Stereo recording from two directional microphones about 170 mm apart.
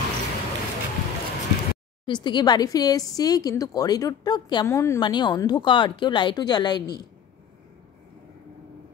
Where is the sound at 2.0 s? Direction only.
25° left (ahead or behind).